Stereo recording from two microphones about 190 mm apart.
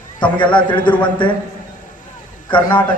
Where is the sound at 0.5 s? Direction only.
25° left (ahead or behind).